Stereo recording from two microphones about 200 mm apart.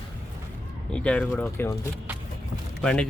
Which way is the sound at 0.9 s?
5° left (ahead or behind).